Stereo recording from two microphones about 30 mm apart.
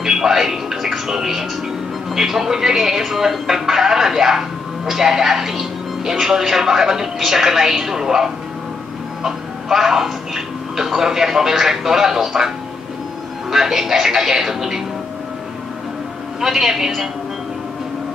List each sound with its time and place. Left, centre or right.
0.0 s television: centre
1.0 s speech: centre
9.2 s music: centre
10.0 s speech: centre
16.3 s speech: centre